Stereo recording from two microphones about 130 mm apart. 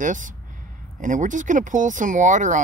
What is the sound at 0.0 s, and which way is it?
Speech, 80° right.